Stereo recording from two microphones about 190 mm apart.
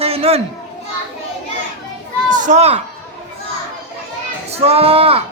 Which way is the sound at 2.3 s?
40° right (ahead or behind).